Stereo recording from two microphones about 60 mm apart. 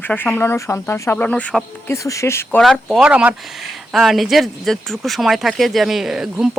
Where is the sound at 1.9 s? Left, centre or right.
Left.